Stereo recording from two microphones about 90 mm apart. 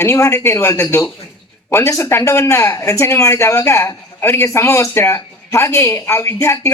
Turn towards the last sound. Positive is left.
turn(degrees=30)  # may be behind; listen again after turning